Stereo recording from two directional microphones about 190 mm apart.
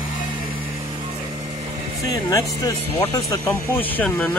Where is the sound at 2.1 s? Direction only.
20° left (ahead or behind).